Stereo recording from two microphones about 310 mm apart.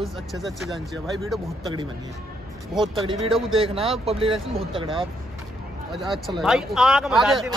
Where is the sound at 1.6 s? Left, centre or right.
Centre.